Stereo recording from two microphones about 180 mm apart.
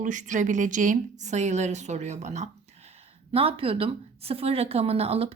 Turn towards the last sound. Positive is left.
turn(degrees=-35)  # may be behind; listen again after turning